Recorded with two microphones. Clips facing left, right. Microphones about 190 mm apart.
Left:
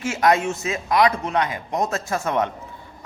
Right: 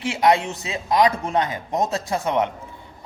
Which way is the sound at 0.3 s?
20° right (ahead or behind).